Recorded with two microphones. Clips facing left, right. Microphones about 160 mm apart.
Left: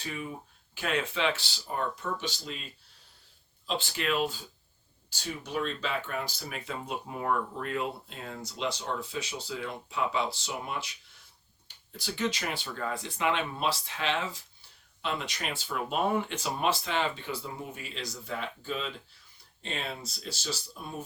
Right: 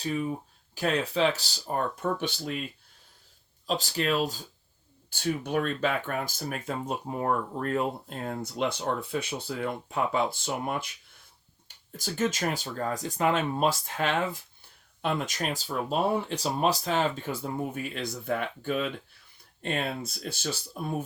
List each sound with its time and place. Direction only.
0.0 s speech: 35° right (ahead or behind)
1.6 s speech: 55° right (ahead or behind)
3.7 s speech: 40° right (ahead or behind)
5.0 s speech: 55° right (ahead or behind)